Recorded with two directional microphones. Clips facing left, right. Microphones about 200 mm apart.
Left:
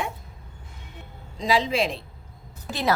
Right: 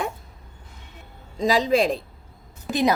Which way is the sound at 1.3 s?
45° right (ahead or behind).